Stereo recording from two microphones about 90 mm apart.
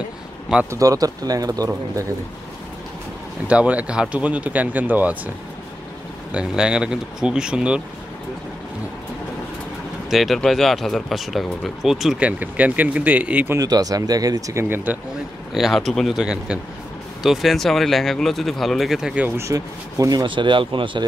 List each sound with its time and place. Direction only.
0.7 s speech: 40° right (ahead or behind)
3.4 s speech: 15° right (ahead or behind)
6.3 s speech: 10° right (ahead or behind)
10.0 s speech: centre (ahead or behind)
12.2 s speech: 15° right (ahead or behind)
13.6 s speech: 45° right (ahead or behind); by 15.0 s 20° right (ahead or behind)
15.5 s speech: centre (ahead or behind)
19.2 s speech: 30° right (ahead or behind)
19.5 s speech: 40° right (ahead or behind)
20.2 s speech: 65° right (ahead or behind)